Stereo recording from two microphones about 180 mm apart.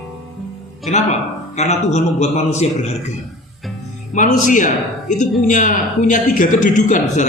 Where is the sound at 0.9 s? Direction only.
40° left (ahead or behind).